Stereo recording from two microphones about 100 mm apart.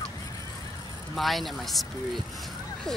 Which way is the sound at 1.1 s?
Centre (ahead or behind).